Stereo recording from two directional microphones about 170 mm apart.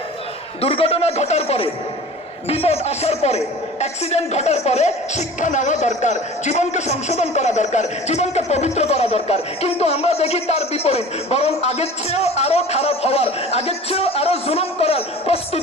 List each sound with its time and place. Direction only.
0.6 s a woman's voice: 35° left (ahead or behind)